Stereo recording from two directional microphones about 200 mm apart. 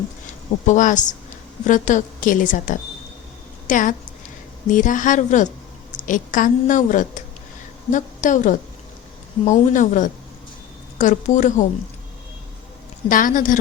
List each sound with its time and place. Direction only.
0.6 s a woman's voice: 40° left (ahead or behind)
13.1 s a woman's voice: 40° left (ahead or behind)